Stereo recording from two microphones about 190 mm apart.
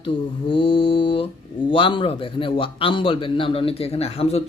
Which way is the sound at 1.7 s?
25° left (ahead or behind).